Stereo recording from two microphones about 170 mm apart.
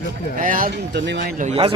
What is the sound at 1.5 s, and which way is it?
Speech, 30° right (ahead or behind).